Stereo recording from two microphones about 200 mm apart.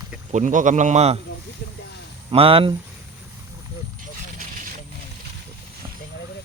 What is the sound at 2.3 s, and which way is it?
Speech, 25° right (ahead or behind).